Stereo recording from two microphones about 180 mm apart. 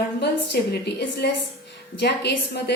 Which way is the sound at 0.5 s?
60° left (ahead or behind).